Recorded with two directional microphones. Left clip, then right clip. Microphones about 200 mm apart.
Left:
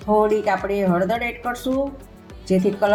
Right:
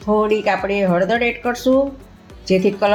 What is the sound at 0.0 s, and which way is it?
Speech, 35° right (ahead or behind).